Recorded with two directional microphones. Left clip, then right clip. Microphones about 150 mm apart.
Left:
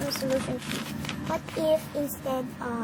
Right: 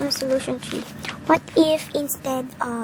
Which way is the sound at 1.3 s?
45° right (ahead or behind).